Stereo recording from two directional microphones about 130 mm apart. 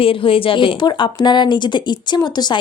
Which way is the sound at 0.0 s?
45° left (ahead or behind).